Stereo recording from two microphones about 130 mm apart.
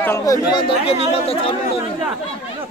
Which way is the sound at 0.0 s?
20° left (ahead or behind).